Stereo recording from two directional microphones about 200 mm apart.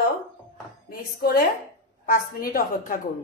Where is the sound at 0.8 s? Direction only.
50° left (ahead or behind).